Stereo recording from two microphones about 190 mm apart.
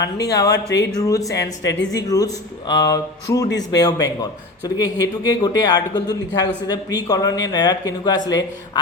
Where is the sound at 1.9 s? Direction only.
20° left (ahead or behind).